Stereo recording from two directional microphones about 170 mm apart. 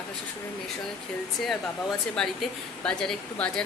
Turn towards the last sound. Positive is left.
turn(degrees=5)  # may be behind; listen again after turning